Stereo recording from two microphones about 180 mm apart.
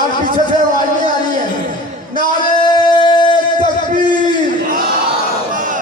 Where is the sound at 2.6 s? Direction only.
25° left (ahead or behind).